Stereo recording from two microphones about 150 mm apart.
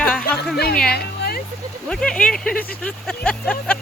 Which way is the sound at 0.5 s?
90° left.